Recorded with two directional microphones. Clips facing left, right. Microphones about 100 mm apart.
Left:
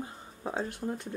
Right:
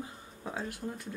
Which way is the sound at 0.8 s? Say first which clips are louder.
Left 6 dB; 20° left (ahead or behind).